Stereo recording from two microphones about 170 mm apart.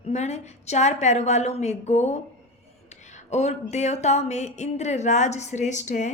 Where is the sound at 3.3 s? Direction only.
40° left (ahead or behind).